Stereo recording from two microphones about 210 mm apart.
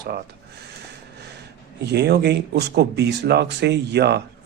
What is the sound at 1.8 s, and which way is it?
Speech, 50° right (ahead or behind).